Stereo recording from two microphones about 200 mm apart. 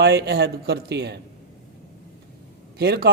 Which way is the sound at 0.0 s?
55° right (ahead or behind).